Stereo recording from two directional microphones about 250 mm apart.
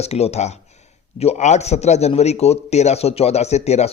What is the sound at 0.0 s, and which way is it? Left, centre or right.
A man's voice, left.